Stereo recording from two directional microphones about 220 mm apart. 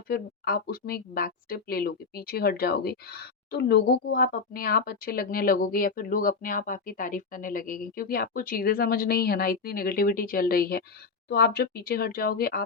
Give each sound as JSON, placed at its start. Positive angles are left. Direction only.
{"t": 0.1, "sound": "speech", "side_deg": 45}